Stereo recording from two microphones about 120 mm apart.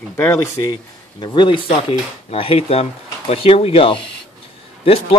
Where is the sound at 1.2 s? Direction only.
40° left (ahead or behind).